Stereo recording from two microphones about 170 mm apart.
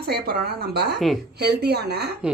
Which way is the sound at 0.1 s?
70° right (ahead or behind).